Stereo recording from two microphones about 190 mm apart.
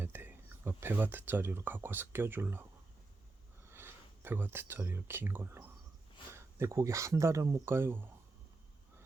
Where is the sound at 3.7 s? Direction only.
10° right (ahead or behind).